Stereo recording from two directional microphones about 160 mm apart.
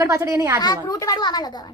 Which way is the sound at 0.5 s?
25° left (ahead or behind).